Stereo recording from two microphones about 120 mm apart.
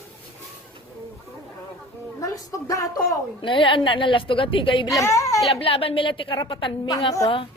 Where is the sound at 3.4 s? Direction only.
45° left (ahead or behind).